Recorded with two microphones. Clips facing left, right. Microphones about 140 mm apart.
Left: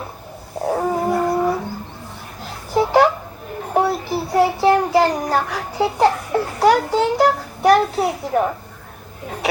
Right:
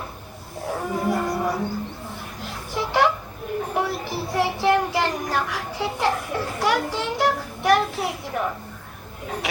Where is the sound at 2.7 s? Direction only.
40° left (ahead or behind).